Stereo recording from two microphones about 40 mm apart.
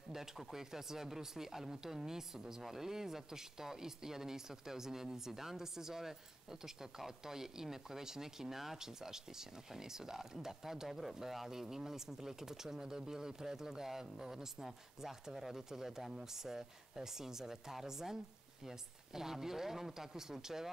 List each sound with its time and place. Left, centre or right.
0.1 s speech: centre